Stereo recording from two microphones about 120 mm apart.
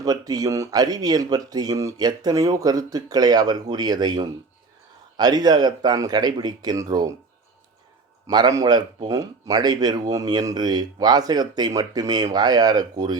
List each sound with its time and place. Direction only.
0.0 s speech: 30° right (ahead or behind)
8.3 s speech: 35° right (ahead or behind)